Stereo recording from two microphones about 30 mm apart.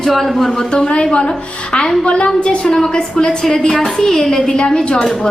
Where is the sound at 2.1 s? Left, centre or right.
Left.